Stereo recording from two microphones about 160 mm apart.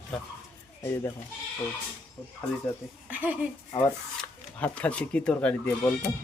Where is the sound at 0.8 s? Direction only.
15° left (ahead or behind).